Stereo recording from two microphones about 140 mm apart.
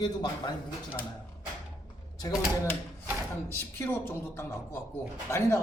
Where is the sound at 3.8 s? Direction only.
15° left (ahead or behind).